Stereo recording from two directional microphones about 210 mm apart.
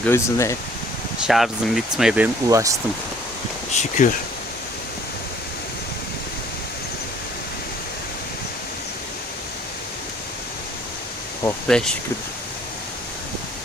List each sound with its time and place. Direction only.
0.0 s speech: 10° left (ahead or behind)
1.3 s speech: centre (ahead or behind)
3.8 s speech: 35° left (ahead or behind)
11.4 s speech: 5° left (ahead or behind)